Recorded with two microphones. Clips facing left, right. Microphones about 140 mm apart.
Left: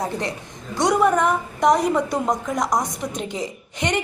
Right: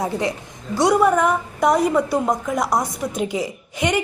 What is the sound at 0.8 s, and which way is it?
A woman's voice, 5° right (ahead or behind).